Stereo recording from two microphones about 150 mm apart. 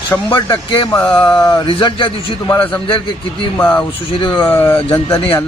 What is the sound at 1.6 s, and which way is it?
Speech, 35° left (ahead or behind).